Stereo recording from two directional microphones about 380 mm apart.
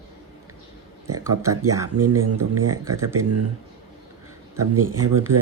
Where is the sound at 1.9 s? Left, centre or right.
Right.